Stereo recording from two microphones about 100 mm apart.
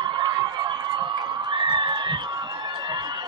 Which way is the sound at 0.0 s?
50° right (ahead or behind).